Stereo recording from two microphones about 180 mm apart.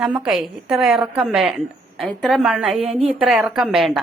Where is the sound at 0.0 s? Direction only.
5° right (ahead or behind).